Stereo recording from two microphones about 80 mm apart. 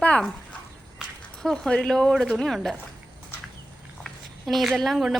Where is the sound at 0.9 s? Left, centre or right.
Centre.